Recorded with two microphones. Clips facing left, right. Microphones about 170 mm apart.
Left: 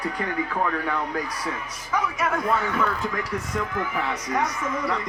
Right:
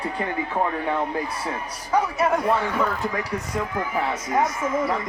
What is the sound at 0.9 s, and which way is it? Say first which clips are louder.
Speech: right 3 dB; 25° right (ahead or behind).